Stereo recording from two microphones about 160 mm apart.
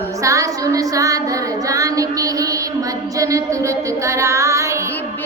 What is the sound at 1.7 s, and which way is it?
Music, 20° right (ahead or behind).